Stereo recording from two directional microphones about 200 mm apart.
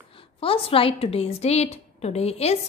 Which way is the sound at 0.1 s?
25° left (ahead or behind).